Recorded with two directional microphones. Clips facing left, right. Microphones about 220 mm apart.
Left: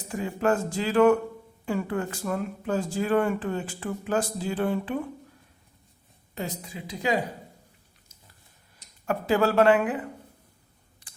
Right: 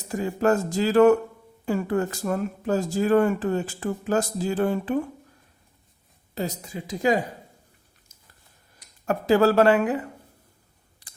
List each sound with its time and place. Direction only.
0.1 s speech: 40° right (ahead or behind)
6.3 s a woman's voice: 40° right (ahead or behind)
9.0 s speech: 40° right (ahead or behind)